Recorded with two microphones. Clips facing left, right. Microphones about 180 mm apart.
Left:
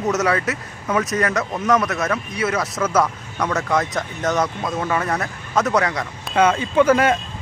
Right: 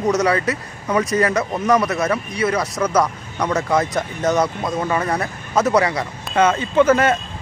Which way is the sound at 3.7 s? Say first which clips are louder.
Right 2 dB; centre (ahead or behind).